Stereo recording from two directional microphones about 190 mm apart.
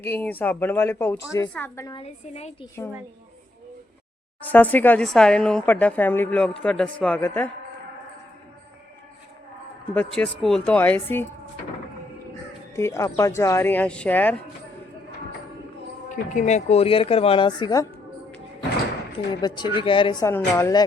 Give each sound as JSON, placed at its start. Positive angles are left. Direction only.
{"t": 0.0, "sound": "speech", "side_deg": 10}
{"t": 2.0, "sound": "speech", "side_deg": 35}
{"t": 4.4, "sound": "a man's voice", "side_deg": 10}
{"t": 9.9, "sound": "speech", "side_deg": 5}
{"t": 12.7, "sound": "speech", "side_deg": 15}
{"t": 16.0, "sound": "speech", "side_deg": 40}
{"t": 19.4, "sound": "speech", "side_deg": 25}